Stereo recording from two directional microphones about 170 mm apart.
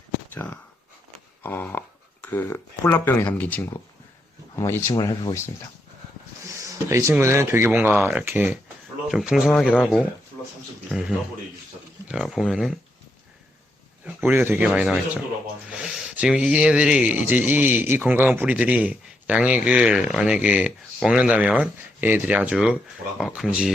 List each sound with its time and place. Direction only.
0.3 s speech: 10° left (ahead or behind)
1.4 s a sound: 10° left (ahead or behind)
2.2 s speech: 10° left (ahead or behind)
6.5 s speech: 20° right (ahead or behind)
9.0 s speech: centre (ahead or behind)
14.0 s speech: 10° right (ahead or behind)